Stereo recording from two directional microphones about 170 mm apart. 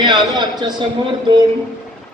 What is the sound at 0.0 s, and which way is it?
Speech, 25° right (ahead or behind).